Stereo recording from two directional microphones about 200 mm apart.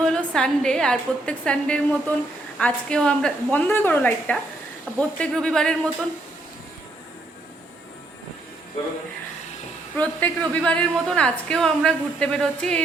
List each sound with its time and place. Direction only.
0.0 s a woman's voice: 5° left (ahead or behind)
10.0 s a woman's voice: 10° left (ahead or behind)